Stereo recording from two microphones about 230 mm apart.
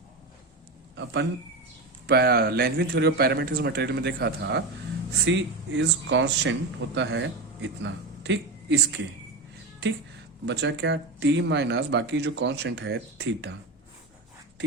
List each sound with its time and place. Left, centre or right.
0.9 s speech: right
10.4 s speech: right